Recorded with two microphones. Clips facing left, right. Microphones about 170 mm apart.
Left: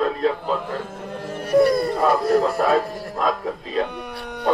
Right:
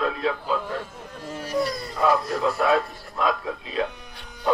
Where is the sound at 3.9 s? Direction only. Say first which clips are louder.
Left 13 dB; 65° left (ahead or behind).